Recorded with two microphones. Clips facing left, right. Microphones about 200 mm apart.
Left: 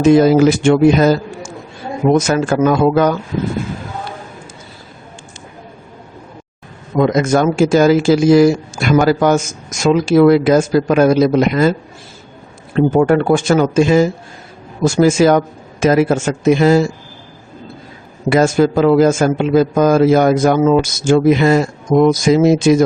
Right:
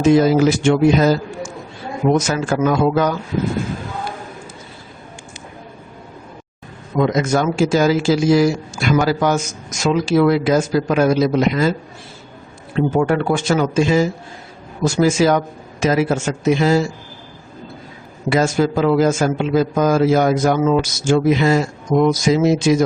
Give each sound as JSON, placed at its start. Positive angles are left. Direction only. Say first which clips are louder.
{"t": 0.1, "sound": "speech", "louder": "left 4 dB", "side_deg": 55}
{"t": 2.1, "sound": "speech", "louder": "left 4 dB", "side_deg": 55}
{"t": 7.0, "sound": "a man's voice", "louder": "left 4 dB", "side_deg": 50}
{"t": 12.7, "sound": "a man's voice", "louder": "left 5 dB", "side_deg": 50}
{"t": 18.3, "sound": "a man's voice", "louder": "left 4 dB", "side_deg": 55}